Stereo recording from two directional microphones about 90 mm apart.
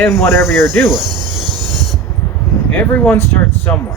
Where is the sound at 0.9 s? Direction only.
50° right (ahead or behind).